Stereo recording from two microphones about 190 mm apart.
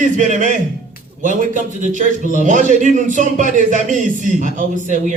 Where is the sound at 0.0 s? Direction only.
40° right (ahead or behind).